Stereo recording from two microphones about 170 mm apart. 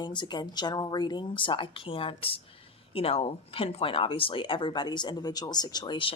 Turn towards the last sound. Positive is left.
turn(degrees=30)  # may be behind; listen again after turning